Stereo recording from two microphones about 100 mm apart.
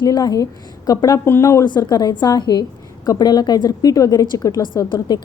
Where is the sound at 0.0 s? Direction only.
40° left (ahead or behind).